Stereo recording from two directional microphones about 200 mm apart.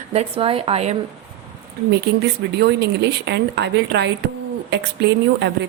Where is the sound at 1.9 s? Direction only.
60° right (ahead or behind).